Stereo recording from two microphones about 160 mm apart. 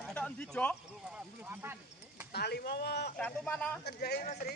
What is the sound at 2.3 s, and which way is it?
Speech, 90° left.